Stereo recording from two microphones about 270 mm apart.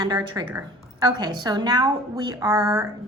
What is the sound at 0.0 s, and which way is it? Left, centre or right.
A woman's voice, centre.